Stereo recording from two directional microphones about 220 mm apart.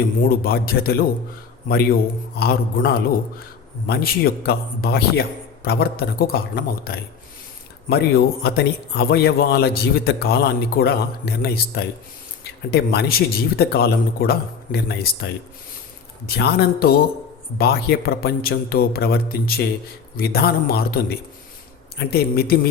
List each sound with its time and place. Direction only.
0.3 s a man's voice: 45° left (ahead or behind)